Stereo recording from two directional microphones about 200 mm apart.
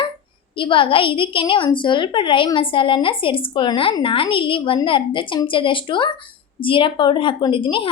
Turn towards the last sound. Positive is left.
turn(degrees=25)  # may be behind; listen again after turning